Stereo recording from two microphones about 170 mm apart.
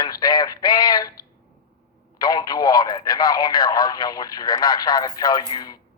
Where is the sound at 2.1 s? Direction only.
25° left (ahead or behind).